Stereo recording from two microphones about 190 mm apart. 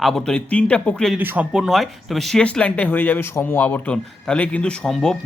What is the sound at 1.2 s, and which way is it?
A man's voice, 10° right (ahead or behind).